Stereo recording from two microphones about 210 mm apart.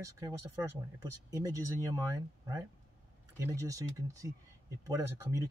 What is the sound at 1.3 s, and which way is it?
Speech, 15° right (ahead or behind).